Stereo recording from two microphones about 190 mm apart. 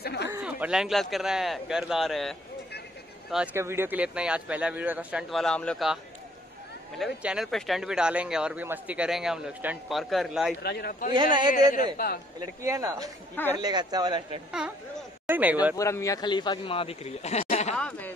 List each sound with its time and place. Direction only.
0.0 s a sound: 60° left (ahead or behind)
0.4 s speech: 5° right (ahead or behind)
3.5 s speech: 15° right (ahead or behind)
7.0 s speech: 5° right (ahead or behind)
10.6 s speech: 55° left (ahead or behind)
12.6 s a man's voice: 15° right (ahead or behind)
15.2 s a man's voice: 10° right (ahead or behind)
15.7 s a man's voice: 15° left (ahead or behind); by 17.7 s 35° left (ahead or behind)
17.7 s speech: 5° left (ahead or behind)